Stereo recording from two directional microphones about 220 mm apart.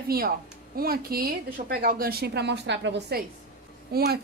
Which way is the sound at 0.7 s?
45° right (ahead or behind).